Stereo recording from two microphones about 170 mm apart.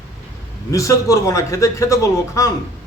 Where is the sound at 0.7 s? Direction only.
20° left (ahead or behind).